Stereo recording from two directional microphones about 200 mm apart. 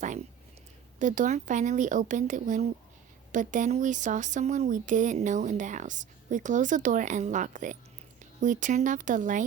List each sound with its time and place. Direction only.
0.9 s speech: 40° right (ahead or behind)